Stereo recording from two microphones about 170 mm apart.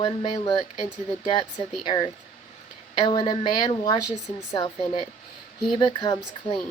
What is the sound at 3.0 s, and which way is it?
Speech, 30° left (ahead or behind).